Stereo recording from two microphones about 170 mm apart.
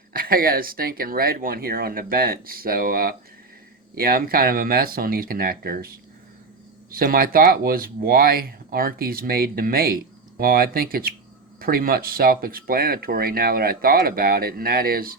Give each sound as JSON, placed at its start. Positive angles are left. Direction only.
{"t": 0.1, "sound": "speech", "side_deg": -60}
{"t": 6.9, "sound": "speech", "side_deg": -60}